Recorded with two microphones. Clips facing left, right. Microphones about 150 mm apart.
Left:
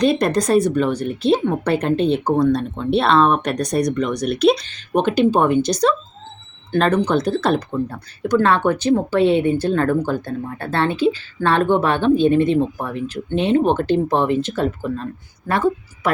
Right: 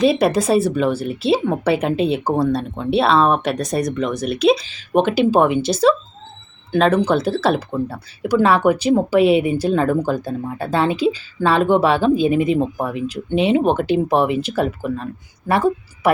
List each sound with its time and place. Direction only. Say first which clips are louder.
0.0 s speech: right 1 dB; 5° right (ahead or behind)
11.5 s speech: right 1 dB; 90° right
12.0 s a woman's voice: left 1 dB; 10° right (ahead or behind)